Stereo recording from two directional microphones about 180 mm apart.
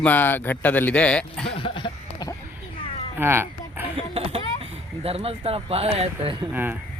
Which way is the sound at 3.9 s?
30° right (ahead or behind).